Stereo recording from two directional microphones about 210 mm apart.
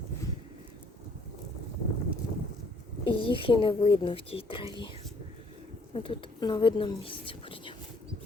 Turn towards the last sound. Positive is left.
turn(degrees=25)  # may be behind; listen again after turning